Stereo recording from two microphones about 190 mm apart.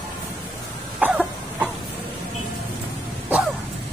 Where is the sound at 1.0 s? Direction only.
5° right (ahead or behind).